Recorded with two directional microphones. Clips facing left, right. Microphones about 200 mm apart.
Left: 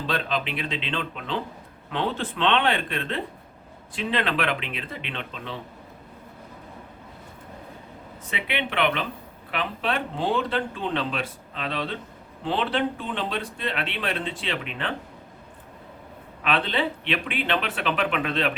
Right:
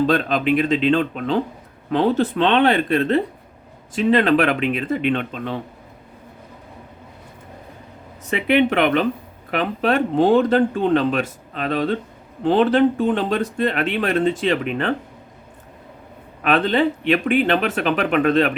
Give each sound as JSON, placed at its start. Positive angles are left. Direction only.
{"t": 0.1, "sound": "speech", "side_deg": -45}
{"t": 8.3, "sound": "speech", "side_deg": -45}
{"t": 16.4, "sound": "speech", "side_deg": -45}